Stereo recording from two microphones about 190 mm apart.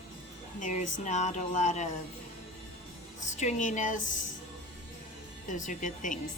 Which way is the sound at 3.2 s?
40° left (ahead or behind).